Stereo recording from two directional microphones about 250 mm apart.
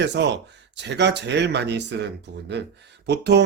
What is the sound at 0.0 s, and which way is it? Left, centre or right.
Speech, right.